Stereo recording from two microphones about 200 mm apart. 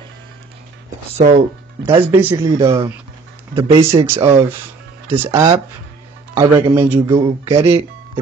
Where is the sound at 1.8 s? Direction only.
10° right (ahead or behind).